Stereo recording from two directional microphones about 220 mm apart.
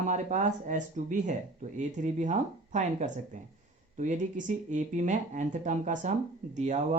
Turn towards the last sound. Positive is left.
turn(degrees=-30)  # may be behind; listen again after turning